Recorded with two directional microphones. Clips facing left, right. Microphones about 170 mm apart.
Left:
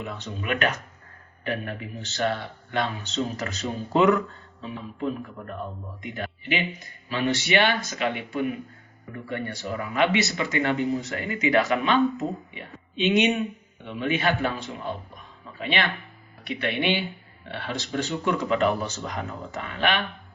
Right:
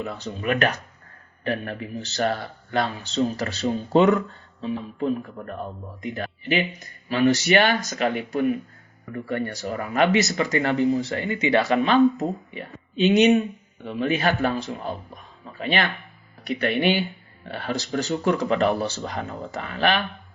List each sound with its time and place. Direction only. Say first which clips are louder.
0.0 s a man's voice: right 5 dB; 40° right (ahead or behind)
6.0 s a man's voice: right 4 dB; 40° right (ahead or behind)